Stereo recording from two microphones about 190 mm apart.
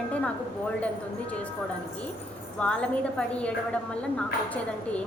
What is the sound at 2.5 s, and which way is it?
Speech, 5° left (ahead or behind).